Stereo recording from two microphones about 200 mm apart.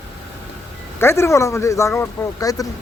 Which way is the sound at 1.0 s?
15° left (ahead or behind).